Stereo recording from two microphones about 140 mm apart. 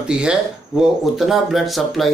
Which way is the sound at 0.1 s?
5° right (ahead or behind).